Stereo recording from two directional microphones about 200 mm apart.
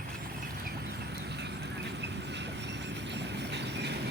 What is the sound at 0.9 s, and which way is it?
Vehicle, 60° right (ahead or behind).